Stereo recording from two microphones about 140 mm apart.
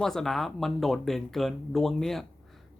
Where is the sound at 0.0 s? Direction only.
5° left (ahead or behind).